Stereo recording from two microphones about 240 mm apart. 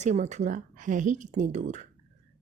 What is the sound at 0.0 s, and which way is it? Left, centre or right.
A woman's voice, right.